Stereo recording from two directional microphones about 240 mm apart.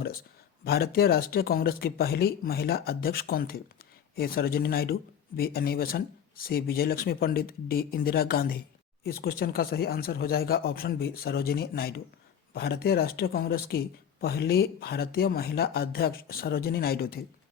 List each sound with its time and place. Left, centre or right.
0.6 s speech: left